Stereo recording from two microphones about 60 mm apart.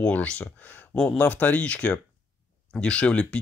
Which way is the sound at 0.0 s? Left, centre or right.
Left.